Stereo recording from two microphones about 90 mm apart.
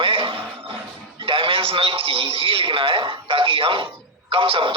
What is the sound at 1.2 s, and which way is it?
A man's voice, 70° right (ahead or behind).